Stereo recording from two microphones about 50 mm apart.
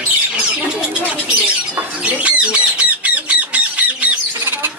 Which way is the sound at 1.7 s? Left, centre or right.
Right.